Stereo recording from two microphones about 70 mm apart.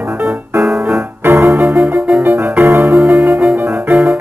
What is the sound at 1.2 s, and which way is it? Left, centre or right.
Keyboard, right.